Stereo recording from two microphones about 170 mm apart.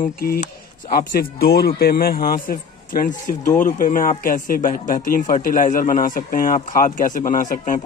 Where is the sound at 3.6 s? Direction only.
50° left (ahead or behind).